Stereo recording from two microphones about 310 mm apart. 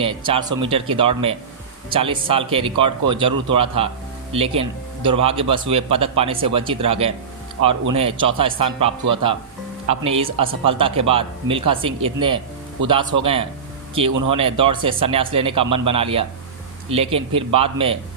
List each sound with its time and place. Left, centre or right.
0.0 s a man's voice: centre